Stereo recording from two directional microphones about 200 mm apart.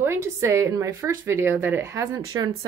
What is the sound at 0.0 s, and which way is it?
A woman's voice, 10° right (ahead or behind).